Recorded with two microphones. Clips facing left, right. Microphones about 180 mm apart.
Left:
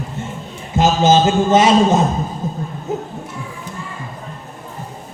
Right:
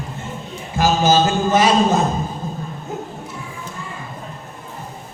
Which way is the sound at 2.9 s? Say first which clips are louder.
Left 6 dB; 20° left (ahead or behind).